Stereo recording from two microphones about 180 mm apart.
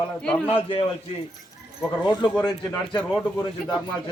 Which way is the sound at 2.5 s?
20° left (ahead or behind).